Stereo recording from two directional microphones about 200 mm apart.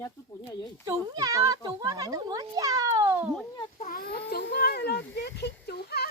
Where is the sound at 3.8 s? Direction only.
45° left (ahead or behind).